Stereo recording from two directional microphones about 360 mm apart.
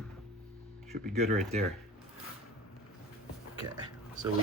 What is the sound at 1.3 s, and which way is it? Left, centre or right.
Speech, centre.